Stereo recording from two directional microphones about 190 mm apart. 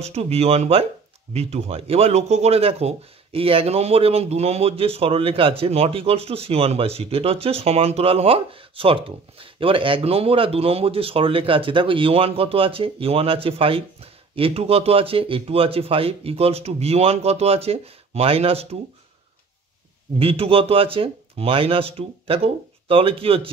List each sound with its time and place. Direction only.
0.0 s speech: 35° right (ahead or behind)
20.2 s speech: 30° right (ahead or behind)